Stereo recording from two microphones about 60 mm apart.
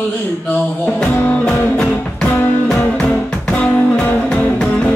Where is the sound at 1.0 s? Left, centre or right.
Centre.